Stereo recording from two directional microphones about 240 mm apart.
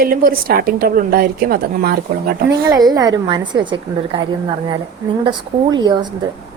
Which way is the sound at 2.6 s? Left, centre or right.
Centre.